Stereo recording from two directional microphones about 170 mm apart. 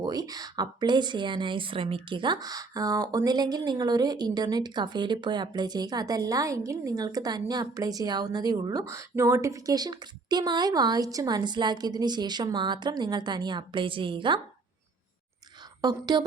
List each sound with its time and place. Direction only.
0.0 s speech: 25° right (ahead or behind)
15.8 s speech: 25° right (ahead or behind)